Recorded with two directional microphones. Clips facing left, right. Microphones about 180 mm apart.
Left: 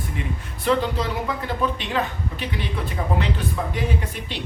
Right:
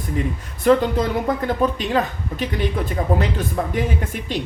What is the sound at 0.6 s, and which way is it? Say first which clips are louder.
Speech: right 6 dB; 50° right (ahead or behind).